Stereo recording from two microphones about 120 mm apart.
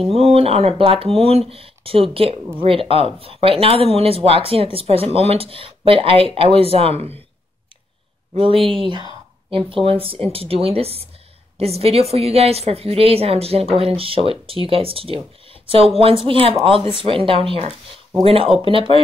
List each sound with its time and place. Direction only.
0.1 s speech: 55° right (ahead or behind)
8.4 s a woman's voice: 50° right (ahead or behind)